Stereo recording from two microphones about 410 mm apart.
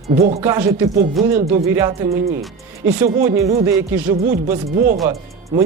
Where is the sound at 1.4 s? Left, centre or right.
Centre.